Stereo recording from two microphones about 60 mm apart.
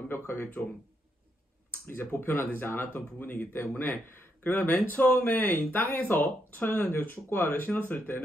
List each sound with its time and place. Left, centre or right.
0.1 s speech: left
1.7 s speech: left